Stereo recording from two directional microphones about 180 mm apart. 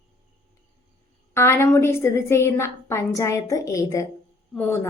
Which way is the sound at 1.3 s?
15° left (ahead or behind).